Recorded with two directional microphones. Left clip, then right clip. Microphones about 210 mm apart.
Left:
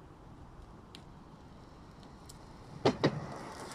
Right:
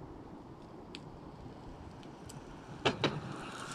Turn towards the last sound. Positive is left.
turn(degrees=30)  # may be behind; listen again after turning